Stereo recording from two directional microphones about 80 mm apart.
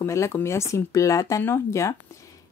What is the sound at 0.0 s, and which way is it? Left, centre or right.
Speech, left.